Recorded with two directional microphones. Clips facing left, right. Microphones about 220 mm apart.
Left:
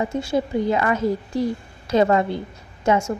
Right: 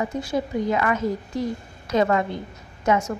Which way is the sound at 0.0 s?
25° left (ahead or behind).